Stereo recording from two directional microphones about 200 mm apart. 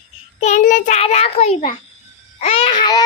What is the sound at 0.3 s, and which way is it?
A child's voice, 35° left (ahead or behind).